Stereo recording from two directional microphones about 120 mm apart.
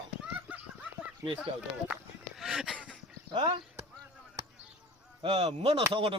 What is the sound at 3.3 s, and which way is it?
Speech, 45° right (ahead or behind).